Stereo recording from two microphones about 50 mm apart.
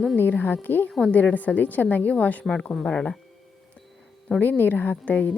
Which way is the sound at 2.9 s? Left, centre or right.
Centre.